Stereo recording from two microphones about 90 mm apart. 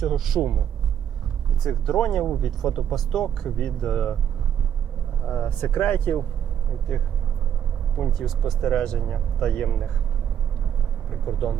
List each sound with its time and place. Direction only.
0.0 s speech: centre (ahead or behind)
1.6 s speech: centre (ahead or behind)
5.2 s speech: 10° left (ahead or behind)
8.2 s speech: centre (ahead or behind)
11.3 s speech: centre (ahead or behind)